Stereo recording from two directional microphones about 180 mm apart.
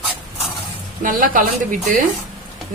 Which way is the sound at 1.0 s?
50° right (ahead or behind).